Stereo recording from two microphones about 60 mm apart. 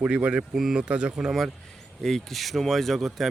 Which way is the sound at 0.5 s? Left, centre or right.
Centre.